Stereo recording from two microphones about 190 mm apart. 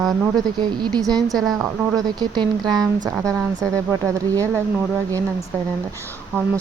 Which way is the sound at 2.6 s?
Centre (ahead or behind).